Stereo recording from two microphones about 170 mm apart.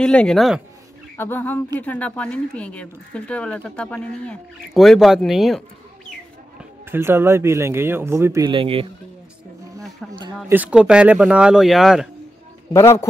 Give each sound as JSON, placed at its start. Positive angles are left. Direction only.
{"t": 0.0, "sound": "speech", "side_deg": 5}
{"t": 1.1, "sound": "speech", "side_deg": 10}
{"t": 6.9, "sound": "speech", "side_deg": -15}
{"t": 8.5, "sound": "speech", "side_deg": -30}
{"t": 10.5, "sound": "speech", "side_deg": -10}
{"t": 12.7, "sound": "speech", "side_deg": 15}